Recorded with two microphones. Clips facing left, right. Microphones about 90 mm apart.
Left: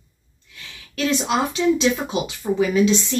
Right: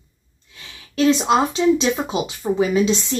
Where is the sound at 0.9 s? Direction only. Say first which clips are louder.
Right 5 dB; 25° right (ahead or behind).